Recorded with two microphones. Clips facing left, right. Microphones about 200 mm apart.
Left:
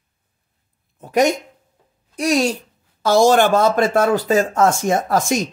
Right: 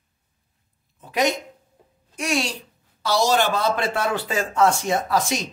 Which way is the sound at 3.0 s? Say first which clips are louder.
Left 7 dB; 50° left (ahead or behind).